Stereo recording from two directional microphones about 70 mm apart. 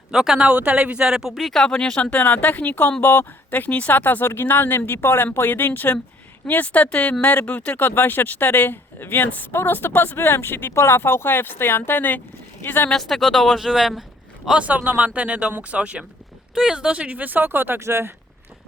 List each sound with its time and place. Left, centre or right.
0.1 s speech: centre
1.4 s speech: centre; by 12.9 s left
12.9 s speech: centre
14.6 s speech: centre; by 18.1 s right